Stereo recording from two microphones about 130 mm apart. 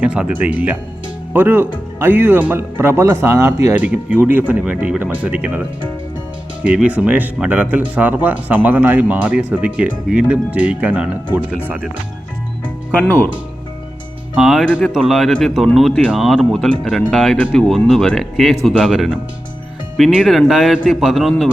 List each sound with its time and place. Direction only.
0.0 s speech: 10° right (ahead or behind)
13.0 s speech: 15° left (ahead or behind)
14.3 s speech: 5° right (ahead or behind)